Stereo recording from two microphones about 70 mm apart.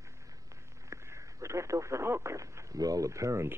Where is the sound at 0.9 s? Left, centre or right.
Right.